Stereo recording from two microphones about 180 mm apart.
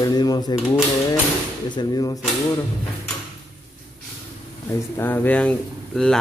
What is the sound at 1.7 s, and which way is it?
Speech, 25° left (ahead or behind).